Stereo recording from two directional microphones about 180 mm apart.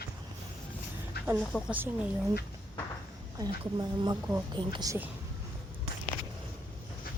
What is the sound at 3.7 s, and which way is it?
A woman's voice, 20° right (ahead or behind).